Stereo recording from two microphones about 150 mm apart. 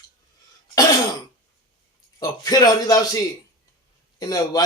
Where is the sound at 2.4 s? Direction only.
25° left (ahead or behind).